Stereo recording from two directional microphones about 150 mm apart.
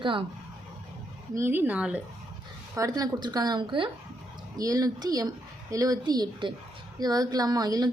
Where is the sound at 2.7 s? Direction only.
25° right (ahead or behind).